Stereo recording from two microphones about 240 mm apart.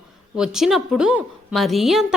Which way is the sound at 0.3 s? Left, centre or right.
Centre.